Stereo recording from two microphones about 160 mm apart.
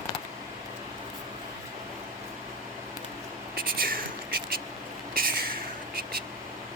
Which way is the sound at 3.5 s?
65° right (ahead or behind).